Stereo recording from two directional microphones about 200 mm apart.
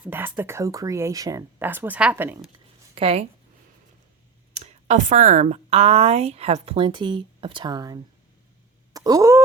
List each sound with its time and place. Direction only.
0.0 s speech: 10° right (ahead or behind)
2.9 s speech: 30° right (ahead or behind)
4.5 s speech: 35° right (ahead or behind); by 8.0 s 20° right (ahead or behind)
8.9 s a sound: 20° right (ahead or behind)